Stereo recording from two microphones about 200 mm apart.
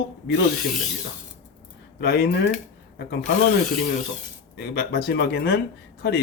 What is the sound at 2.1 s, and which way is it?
Speech, 55° left (ahead or behind).